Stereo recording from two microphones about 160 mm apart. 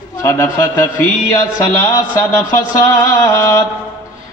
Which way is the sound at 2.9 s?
20° left (ahead or behind).